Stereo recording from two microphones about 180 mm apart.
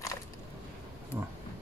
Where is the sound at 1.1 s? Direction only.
10° right (ahead or behind).